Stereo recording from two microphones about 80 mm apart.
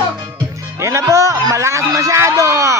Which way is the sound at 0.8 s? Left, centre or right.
Right.